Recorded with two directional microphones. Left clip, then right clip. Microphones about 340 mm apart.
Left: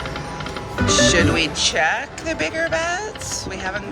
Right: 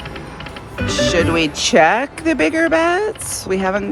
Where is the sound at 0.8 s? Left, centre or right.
Centre.